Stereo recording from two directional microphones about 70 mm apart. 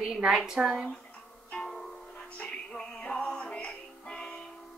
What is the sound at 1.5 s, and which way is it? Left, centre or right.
Music, centre.